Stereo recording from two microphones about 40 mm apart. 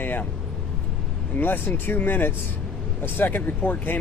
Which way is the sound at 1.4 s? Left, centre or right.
Left.